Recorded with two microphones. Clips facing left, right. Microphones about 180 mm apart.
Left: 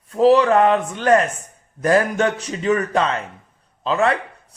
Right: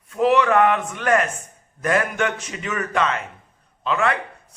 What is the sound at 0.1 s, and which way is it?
A man's voice, 30° left (ahead or behind).